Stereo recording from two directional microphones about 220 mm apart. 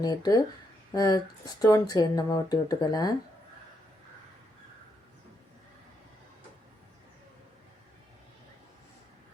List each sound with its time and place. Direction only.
0.0 s speech: 15° left (ahead or behind)